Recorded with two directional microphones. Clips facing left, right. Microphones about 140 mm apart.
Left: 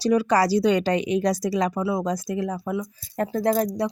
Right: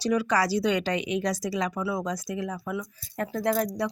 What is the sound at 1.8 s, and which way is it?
Speech, 30° left (ahead or behind).